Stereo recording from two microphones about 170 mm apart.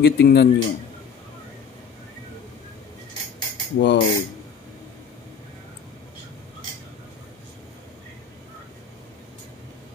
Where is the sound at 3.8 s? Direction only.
75° left (ahead or behind).